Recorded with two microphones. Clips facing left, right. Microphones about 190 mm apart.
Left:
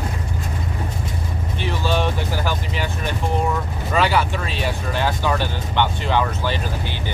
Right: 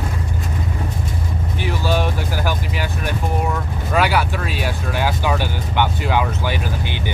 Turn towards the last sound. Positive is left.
turn(degrees=-15)  # may be behind; listen again after turning